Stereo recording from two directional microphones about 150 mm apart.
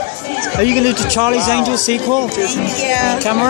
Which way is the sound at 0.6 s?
25° right (ahead or behind).